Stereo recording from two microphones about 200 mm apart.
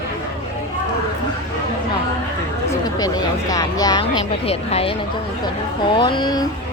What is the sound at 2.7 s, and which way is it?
Speech, 20° left (ahead or behind).